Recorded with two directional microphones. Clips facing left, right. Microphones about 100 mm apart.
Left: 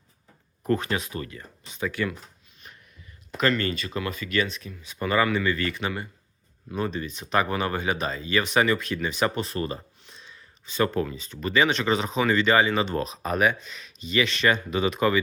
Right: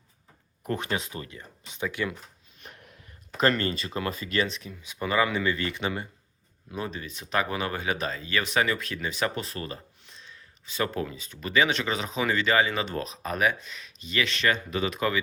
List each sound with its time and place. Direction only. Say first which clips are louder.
0.7 s speech: left 4 dB; 20° right (ahead or behind)
2.6 s a sound: right 2 dB; 75° right (ahead or behind)
3.3 s speech: even; 35° right (ahead or behind); by 5.3 s 5° right (ahead or behind)
5.3 s speech: left 2 dB; 20° right (ahead or behind)
6.7 s speech: left 5 dB; 10° right (ahead or behind)